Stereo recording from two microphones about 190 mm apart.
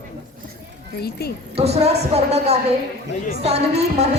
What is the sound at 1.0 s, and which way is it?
Speech, 55° left (ahead or behind).